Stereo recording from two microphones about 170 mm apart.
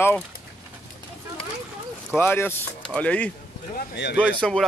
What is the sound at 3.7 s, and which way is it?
Speech, 80° left.